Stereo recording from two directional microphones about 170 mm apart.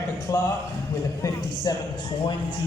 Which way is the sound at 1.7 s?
25° left (ahead or behind).